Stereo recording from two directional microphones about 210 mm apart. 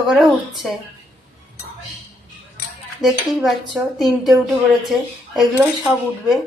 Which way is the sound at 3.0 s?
Centre (ahead or behind).